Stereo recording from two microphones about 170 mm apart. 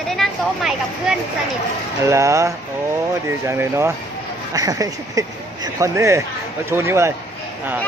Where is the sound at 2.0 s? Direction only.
15° right (ahead or behind).